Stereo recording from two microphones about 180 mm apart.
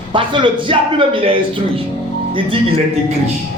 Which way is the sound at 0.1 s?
25° right (ahead or behind).